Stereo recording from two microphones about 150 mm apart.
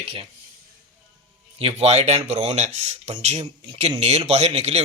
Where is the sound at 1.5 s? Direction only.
45° right (ahead or behind).